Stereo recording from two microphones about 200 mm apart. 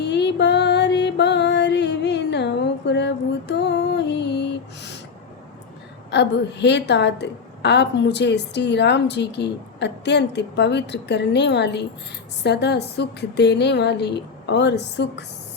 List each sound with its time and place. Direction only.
0.0 s music: 60° left (ahead or behind)
6.1 s a woman's voice: 60° left (ahead or behind)